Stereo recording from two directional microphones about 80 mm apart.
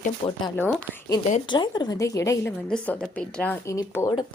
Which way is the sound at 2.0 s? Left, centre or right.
Left.